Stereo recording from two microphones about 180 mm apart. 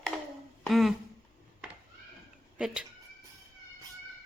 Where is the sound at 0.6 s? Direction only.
Centre (ahead or behind).